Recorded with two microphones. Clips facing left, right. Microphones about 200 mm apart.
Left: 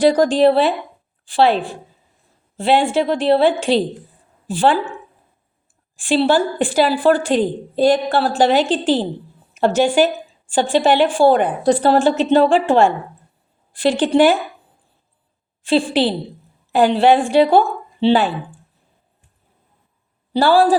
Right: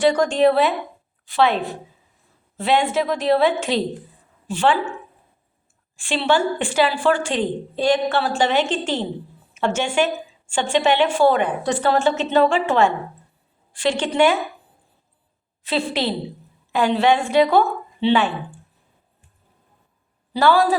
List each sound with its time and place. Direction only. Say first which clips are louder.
0.0 s a woman's voice: left 3 dB; 35° left (ahead or behind)
6.1 s a woman's voice: left 4 dB; 35° left (ahead or behind)
15.6 s a woman's voice: left 6 dB; 30° left (ahead or behind)
20.3 s a woman's voice: left 3 dB; 30° left (ahead or behind)